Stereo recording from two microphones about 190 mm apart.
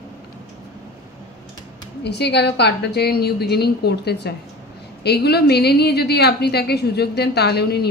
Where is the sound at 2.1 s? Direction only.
60° left (ahead or behind).